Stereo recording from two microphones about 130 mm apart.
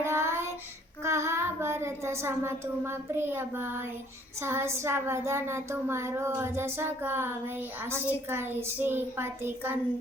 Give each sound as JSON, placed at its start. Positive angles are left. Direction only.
{"t": 0.0, "sound": "child singing", "side_deg": -20}
{"t": 1.0, "sound": "a woman's voice", "side_deg": -20}